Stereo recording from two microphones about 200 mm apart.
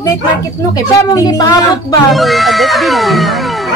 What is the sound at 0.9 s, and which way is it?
Speech, 15° left (ahead or behind).